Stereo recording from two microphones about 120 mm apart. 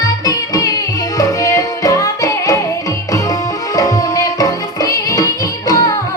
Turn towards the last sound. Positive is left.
turn(degrees=30)  # may be behind; listen again after turning